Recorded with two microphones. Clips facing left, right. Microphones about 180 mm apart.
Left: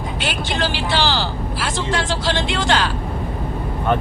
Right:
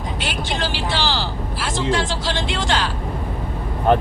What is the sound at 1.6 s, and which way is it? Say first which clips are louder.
Speech: right 2 dB; 65° left (ahead or behind).